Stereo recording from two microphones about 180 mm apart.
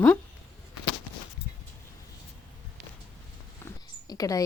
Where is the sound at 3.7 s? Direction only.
20° left (ahead or behind).